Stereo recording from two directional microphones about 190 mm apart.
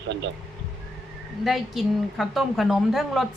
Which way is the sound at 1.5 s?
Centre (ahead or behind).